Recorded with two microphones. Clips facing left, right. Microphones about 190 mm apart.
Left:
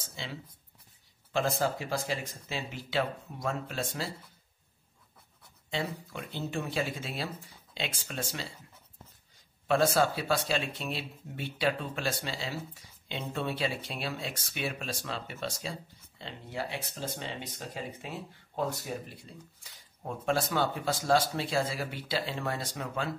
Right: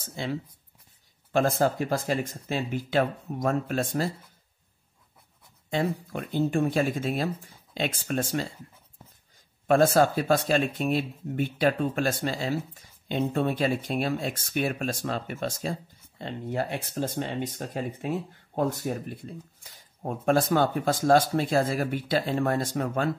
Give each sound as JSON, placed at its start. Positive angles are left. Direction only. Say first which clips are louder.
{"t": 0.0, "sound": "speech", "louder": "right 10 dB", "side_deg": -50}
{"t": 5.7, "sound": "speech", "louder": "right 7 dB", "side_deg": -50}
{"t": 9.7, "sound": "speech", "louder": "right 6 dB", "side_deg": -45}